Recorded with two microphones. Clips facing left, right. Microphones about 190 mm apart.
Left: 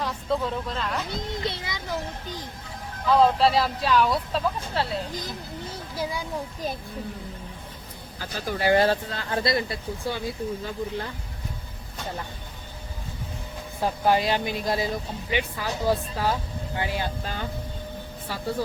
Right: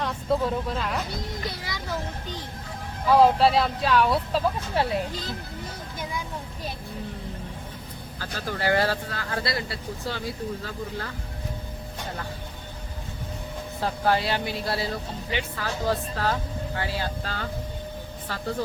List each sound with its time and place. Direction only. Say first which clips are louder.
0.0 s speech: right 2 dB; centre (ahead or behind)
1.1 s speech: left 3 dB; 25° left (ahead or behind)
3.1 s speech: right 1 dB; 10° right (ahead or behind)
4.7 s speech: right 3 dB; 15° right (ahead or behind)
6.0 s speech: left 4 dB; 35° left (ahead or behind)
8.2 s speech: left 2 dB; 15° left (ahead or behind)
13.8 s speech: left 2 dB; 15° left (ahead or behind)